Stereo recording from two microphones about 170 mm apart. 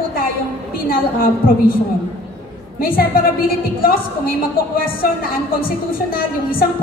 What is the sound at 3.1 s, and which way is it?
A woman's voice, 60° left (ahead or behind).